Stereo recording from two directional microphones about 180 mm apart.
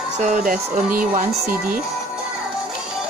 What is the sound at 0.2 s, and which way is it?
Speech, 45° right (ahead or behind).